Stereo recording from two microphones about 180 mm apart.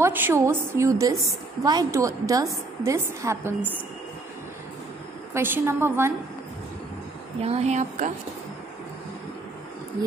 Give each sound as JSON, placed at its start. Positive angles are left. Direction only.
{"t": 0.0, "sound": "a woman's voice", "side_deg": -10}
{"t": 5.3, "sound": "a woman's voice", "side_deg": -15}
{"t": 7.4, "sound": "speech", "side_deg": -35}